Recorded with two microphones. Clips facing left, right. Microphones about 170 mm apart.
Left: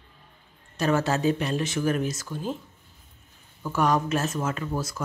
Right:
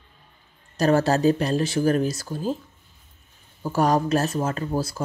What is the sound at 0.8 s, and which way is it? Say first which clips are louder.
Speech: right 5 dB; 35° right (ahead or behind).